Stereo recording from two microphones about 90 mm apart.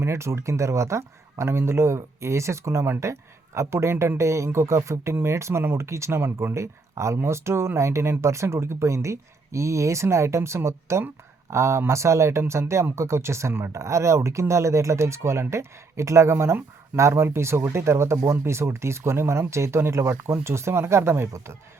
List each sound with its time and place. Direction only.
0.0 s speech: 30° right (ahead or behind)